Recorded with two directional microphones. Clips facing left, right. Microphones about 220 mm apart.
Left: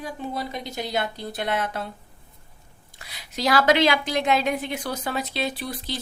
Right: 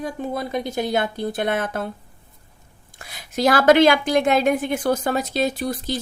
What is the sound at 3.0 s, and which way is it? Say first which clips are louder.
A woman's voice: right 6 dB; 50° right (ahead or behind).